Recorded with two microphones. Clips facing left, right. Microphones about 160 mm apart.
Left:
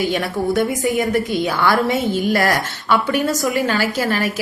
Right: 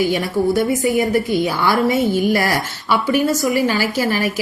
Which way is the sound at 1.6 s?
55° left (ahead or behind).